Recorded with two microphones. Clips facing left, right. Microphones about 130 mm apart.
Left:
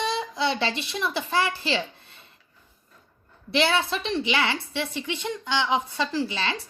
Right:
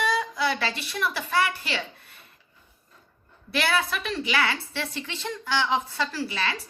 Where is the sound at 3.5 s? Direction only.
25° left (ahead or behind).